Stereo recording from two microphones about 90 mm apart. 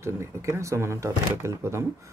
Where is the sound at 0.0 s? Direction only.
30° right (ahead or behind).